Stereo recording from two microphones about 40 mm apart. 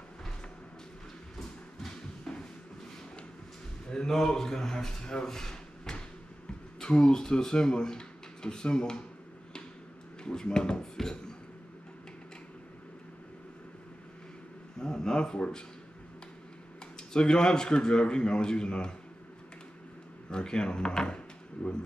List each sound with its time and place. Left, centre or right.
2.3 s a sound: centre
3.9 s speech: centre
10.2 s speech: centre
14.8 s a sound: centre
17.1 s speech: centre
20.2 s speech: left